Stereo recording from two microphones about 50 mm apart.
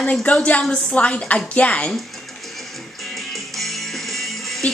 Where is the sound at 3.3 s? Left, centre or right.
Centre.